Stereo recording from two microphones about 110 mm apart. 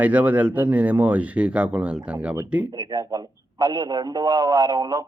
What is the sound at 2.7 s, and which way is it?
A man's voice, 40° right (ahead or behind).